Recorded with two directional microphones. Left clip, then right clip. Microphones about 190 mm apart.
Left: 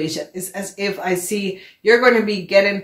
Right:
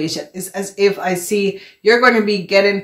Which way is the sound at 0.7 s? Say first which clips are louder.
Right 6 dB; 25° right (ahead or behind).